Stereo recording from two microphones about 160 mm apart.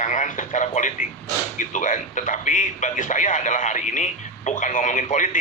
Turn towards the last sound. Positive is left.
turn(degrees=50)  # may be behind; listen again after turning